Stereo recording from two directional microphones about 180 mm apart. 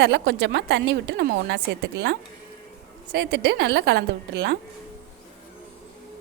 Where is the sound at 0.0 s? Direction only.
75° right (ahead or behind).